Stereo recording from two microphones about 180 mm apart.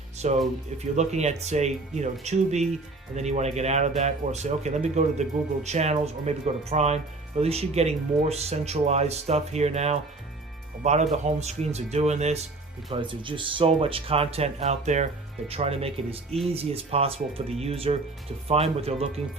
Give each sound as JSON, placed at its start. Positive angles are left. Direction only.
{"t": 0.2, "sound": "speech", "side_deg": -40}
{"t": 12.9, "sound": "speech", "side_deg": -25}